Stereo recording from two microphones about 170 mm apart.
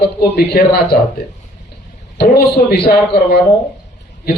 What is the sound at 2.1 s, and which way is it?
Speech, 70° left (ahead or behind).